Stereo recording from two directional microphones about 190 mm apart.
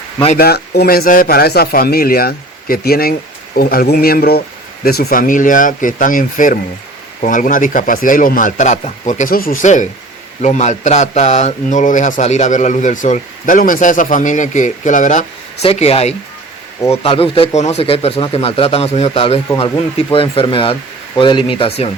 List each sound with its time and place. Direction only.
0.3 s a man's voice: 55° left (ahead or behind); by 21.8 s 30° left (ahead or behind)